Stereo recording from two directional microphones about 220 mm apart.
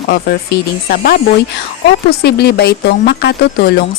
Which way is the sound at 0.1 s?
45° left (ahead or behind).